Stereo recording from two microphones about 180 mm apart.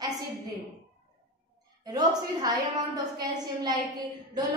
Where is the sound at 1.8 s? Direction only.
20° right (ahead or behind).